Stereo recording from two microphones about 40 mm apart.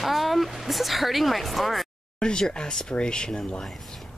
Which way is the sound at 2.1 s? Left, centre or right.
Left.